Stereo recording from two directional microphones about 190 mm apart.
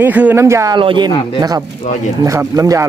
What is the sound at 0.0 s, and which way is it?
Speech, 10° right (ahead or behind).